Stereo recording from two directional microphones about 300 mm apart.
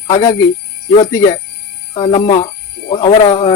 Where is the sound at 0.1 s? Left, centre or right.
Centre.